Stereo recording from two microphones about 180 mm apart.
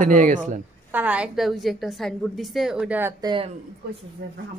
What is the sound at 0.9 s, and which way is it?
A woman's voice, 10° right (ahead or behind).